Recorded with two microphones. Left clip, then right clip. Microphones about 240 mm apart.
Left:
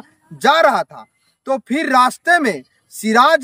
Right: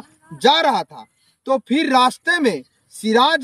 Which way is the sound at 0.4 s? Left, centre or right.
Centre.